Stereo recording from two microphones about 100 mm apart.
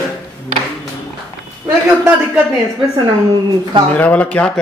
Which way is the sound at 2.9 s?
45° right (ahead or behind).